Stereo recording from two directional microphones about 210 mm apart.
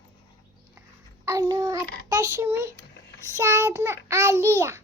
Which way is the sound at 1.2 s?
15° right (ahead or behind).